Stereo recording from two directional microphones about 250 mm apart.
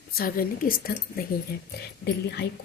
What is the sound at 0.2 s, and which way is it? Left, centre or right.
Speech, left.